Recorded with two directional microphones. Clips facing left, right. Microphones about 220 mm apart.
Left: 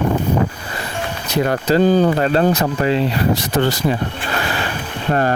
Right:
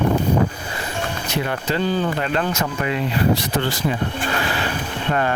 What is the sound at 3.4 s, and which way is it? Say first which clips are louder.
Speech: left 5 dB; 45° left (ahead or behind).